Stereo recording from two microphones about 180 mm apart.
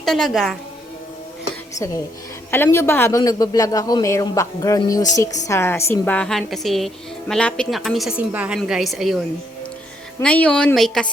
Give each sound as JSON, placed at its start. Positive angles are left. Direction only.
{"t": 0.0, "sound": "a woman's voice", "side_deg": 0}
{"t": 2.5, "sound": "a man's voice", "side_deg": 15}